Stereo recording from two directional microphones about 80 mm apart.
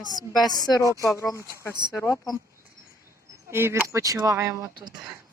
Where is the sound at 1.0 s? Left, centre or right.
Left.